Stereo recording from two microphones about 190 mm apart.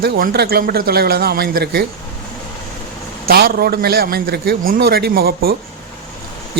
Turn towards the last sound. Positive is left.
turn(degrees=-55)  # may be behind; listen again after turning